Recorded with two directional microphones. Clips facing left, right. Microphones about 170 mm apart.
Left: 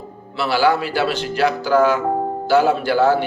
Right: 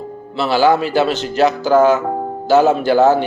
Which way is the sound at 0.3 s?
20° right (ahead or behind).